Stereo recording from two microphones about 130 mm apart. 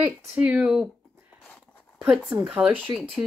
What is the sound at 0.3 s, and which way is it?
Speech, 10° right (ahead or behind).